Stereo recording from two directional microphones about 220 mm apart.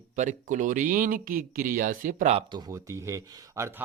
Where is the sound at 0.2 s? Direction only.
35° right (ahead or behind).